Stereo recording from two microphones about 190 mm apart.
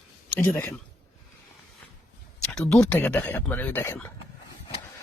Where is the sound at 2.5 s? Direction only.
5° left (ahead or behind).